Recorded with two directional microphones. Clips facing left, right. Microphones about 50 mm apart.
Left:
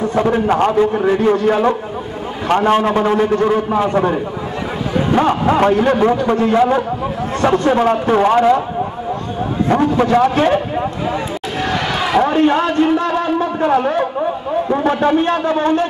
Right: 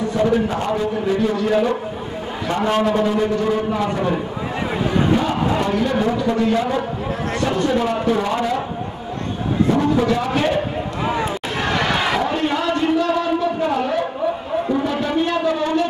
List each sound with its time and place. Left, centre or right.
0.5 s a man's voice: left
5.1 s a man's voice: left
9.7 s a man's voice: left
11.6 s a sound: centre
12.2 s a man's voice: left